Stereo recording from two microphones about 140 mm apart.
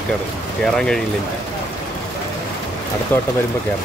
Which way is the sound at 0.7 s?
5° left (ahead or behind).